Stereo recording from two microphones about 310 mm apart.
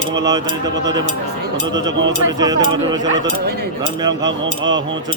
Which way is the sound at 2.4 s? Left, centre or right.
Centre.